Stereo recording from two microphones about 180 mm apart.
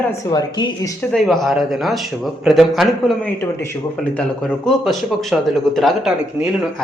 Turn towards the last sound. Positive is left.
turn(degrees=0)  # may be behind; listen again after turning